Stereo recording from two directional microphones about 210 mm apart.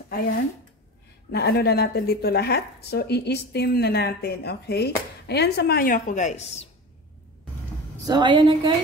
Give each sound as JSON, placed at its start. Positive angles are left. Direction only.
{"t": 1.3, "sound": "speech", "side_deg": 50}
{"t": 8.1, "sound": "a woman's voice", "side_deg": -20}